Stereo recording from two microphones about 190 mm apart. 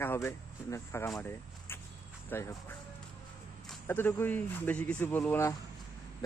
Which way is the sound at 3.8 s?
10° left (ahead or behind).